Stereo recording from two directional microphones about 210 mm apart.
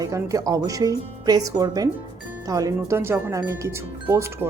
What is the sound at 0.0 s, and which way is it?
Speech, 15° right (ahead or behind).